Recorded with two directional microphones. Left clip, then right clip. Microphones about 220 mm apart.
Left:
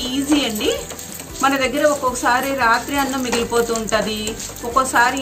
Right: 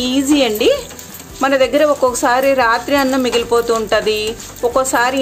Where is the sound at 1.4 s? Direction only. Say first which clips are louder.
Right 4 dB; 50° right (ahead or behind).